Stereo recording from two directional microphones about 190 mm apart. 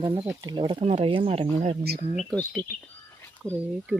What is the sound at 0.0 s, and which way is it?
Speech, 30° right (ahead or behind).